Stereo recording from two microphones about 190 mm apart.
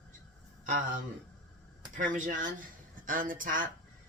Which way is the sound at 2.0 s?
45° right (ahead or behind).